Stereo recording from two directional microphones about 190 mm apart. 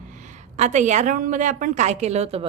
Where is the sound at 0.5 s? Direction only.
40° right (ahead or behind).